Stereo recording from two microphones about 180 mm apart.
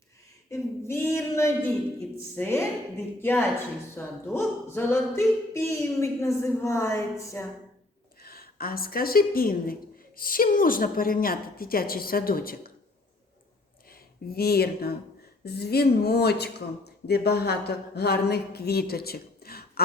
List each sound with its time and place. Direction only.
0.5 s speech: 15° left (ahead or behind)
8.2 s a woman's voice: 55° left (ahead or behind)
14.3 s speech: 60° left (ahead or behind)